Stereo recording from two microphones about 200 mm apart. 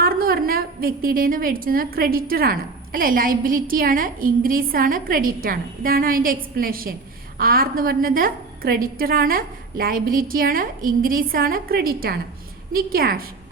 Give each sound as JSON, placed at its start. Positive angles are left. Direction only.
{"t": 0.0, "sound": "a woman's voice", "side_deg": -50}